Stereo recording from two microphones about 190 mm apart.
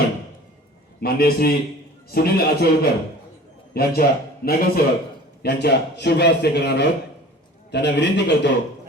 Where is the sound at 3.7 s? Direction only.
55° left (ahead or behind).